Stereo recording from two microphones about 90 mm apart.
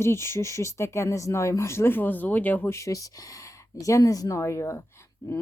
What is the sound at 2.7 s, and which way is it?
Speech, 35° left (ahead or behind).